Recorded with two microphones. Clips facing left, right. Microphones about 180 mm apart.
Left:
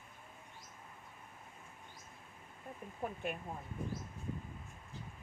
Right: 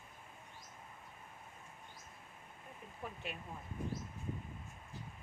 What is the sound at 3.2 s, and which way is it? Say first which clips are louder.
Speech: left 7 dB; 50° left (ahead or behind).